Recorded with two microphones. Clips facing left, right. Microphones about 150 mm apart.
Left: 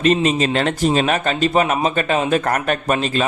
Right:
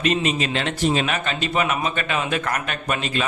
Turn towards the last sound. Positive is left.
turn(degrees=40)  # may be behind; listen again after turning